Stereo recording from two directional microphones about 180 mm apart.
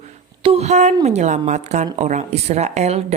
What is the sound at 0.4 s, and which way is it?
A woman's voice, 35° right (ahead or behind).